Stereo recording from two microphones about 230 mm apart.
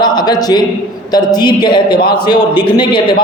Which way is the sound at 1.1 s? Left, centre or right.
Centre.